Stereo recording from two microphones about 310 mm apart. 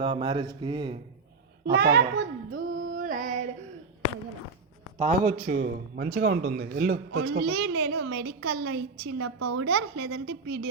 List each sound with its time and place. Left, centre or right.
0.0 s speech: centre
1.6 s child singing: right
4.9 s a man's voice: right
7.1 s a woman's voice: right
9.0 s a woman's voice: right